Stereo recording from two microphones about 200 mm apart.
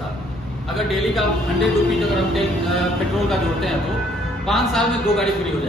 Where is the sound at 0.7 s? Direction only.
Centre (ahead or behind).